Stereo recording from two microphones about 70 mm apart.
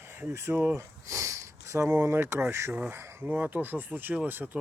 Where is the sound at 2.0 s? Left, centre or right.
Right.